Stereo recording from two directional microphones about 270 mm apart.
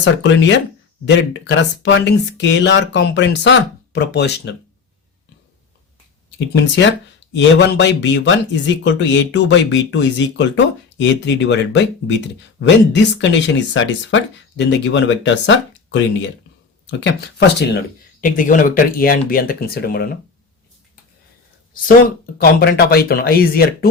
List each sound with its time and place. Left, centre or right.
0.0 s speech: left
6.5 s speech: left
18.2 s speech: left
22.4 s speech: left